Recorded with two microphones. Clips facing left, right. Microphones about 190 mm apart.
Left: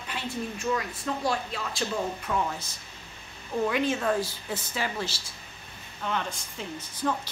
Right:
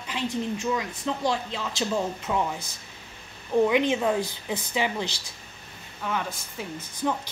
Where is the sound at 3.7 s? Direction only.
15° right (ahead or behind).